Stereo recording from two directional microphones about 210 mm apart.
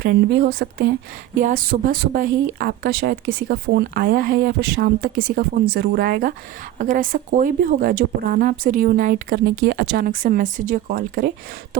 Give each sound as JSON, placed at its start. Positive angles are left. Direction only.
{"t": 0.0, "sound": "a woman's voice", "side_deg": -50}